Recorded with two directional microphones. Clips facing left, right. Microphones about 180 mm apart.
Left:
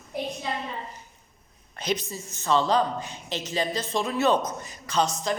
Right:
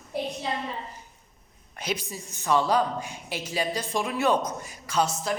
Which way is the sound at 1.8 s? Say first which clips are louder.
Left 3 dB; 10° right (ahead or behind).